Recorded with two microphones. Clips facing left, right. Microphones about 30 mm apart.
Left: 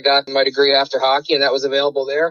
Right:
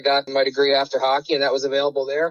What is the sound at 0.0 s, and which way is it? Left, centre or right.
Speech, left.